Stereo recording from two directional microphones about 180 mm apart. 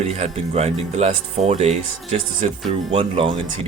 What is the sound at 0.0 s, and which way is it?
Speech, 35° right (ahead or behind).